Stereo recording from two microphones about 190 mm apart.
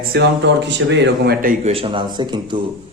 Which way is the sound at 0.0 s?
60° right (ahead or behind).